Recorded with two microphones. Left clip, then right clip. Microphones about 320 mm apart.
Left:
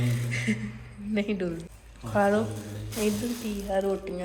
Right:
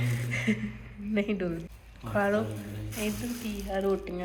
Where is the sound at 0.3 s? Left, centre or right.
Centre.